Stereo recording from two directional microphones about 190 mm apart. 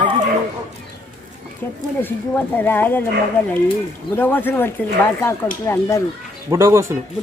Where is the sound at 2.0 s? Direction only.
10° left (ahead or behind).